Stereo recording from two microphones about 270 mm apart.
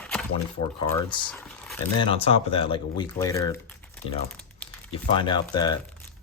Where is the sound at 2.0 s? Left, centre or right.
Left.